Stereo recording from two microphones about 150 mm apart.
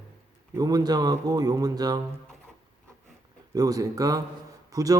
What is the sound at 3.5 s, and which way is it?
Speech, 25° right (ahead or behind).